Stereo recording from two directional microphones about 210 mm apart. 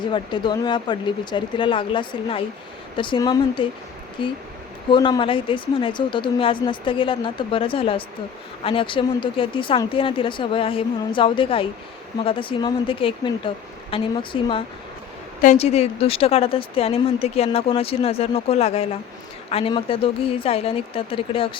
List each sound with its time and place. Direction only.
0.0 s speech: 20° left (ahead or behind)